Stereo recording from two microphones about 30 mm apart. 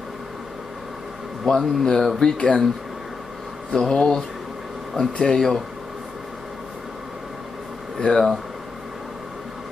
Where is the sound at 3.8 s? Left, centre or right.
Centre.